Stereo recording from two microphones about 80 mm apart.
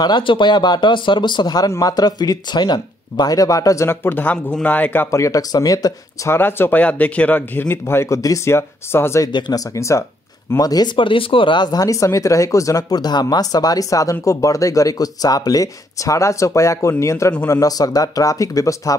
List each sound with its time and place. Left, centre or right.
0.0 s speech: left
1.7 s speech: left
3.9 s speech: left
5.1 s speech: left
5.5 s speech: left
6.3 s speech: left
8.5 s speech: left
10.6 s speech: left
11.0 s speech: left
12.9 s speech: left